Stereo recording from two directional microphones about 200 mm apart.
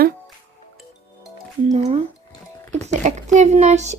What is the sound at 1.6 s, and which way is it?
Speech, 30° right (ahead or behind).